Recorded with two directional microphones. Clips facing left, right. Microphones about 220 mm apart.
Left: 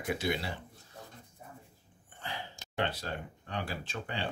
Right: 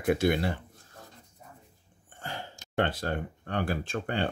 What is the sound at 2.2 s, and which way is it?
Speech, 45° right (ahead or behind).